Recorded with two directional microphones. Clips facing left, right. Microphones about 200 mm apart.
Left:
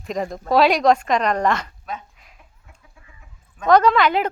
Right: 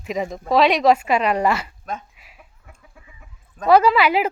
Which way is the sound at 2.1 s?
5° right (ahead or behind).